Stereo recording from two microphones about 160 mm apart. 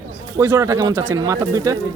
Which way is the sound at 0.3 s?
20° right (ahead or behind).